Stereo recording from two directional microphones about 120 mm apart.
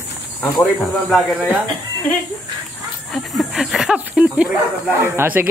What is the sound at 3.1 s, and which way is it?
Speech, centre (ahead or behind).